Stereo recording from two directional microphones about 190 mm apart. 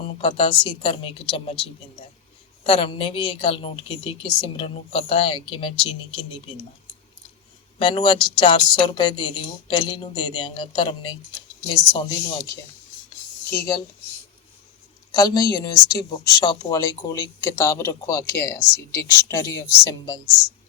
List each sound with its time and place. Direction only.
0.2 s a woman's voice: 30° left (ahead or behind)
7.8 s a woman's voice: 25° left (ahead or behind)
13.5 s speech: 15° left (ahead or behind)
15.1 s speech: 20° left (ahead or behind)